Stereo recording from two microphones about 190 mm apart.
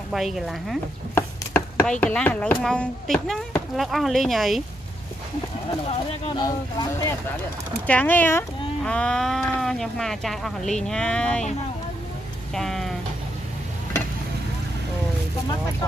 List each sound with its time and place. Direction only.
0.1 s speech: centre (ahead or behind)
1.1 s speech: 10° left (ahead or behind)
5.9 s speech: 25° left (ahead or behind); by 11.4 s 5° left (ahead or behind)
12.5 s a sound: centre (ahead or behind)